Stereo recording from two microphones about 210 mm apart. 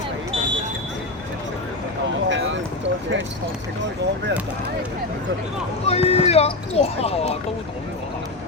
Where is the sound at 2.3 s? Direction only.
60° right (ahead or behind).